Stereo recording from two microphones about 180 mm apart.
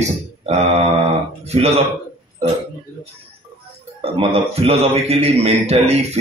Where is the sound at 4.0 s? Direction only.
30° right (ahead or behind).